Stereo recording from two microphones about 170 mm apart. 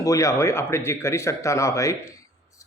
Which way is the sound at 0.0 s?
20° left (ahead or behind).